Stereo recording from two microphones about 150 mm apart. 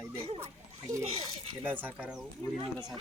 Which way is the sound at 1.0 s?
45° right (ahead or behind).